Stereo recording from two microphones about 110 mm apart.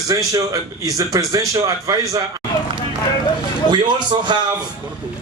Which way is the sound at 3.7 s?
45° right (ahead or behind).